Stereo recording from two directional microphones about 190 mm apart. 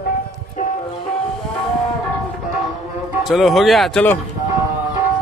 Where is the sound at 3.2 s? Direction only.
Centre (ahead or behind).